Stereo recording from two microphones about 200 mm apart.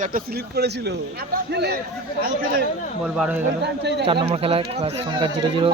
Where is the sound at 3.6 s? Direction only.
55° right (ahead or behind).